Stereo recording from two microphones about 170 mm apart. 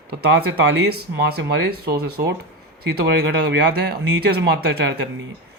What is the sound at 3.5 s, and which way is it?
Speech, 70° right (ahead or behind).